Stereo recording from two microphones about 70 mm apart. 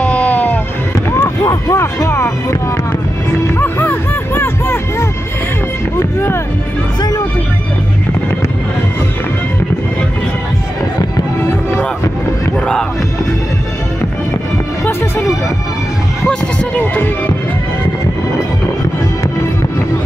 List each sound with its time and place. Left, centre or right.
0.0 s music: left
1.4 s vehicle: left
3.4 s music: left
12.5 s music: centre
16.8 s speech: left